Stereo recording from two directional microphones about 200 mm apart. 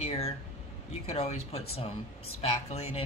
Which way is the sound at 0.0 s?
30° left (ahead or behind).